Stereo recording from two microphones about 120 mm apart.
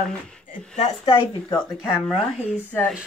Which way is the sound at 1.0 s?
40° left (ahead or behind).